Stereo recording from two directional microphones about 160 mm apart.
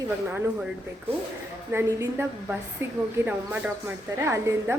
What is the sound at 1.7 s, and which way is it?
Speech, 15° right (ahead or behind).